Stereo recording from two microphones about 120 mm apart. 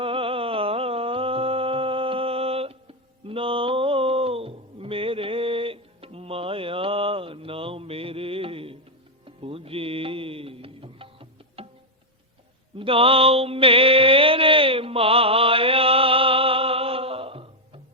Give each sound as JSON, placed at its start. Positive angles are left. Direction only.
{"t": 0.0, "sound": "a sound", "side_deg": -50}
{"t": 9.2, "sound": "music", "side_deg": -50}
{"t": 12.7, "sound": "mantra", "side_deg": -50}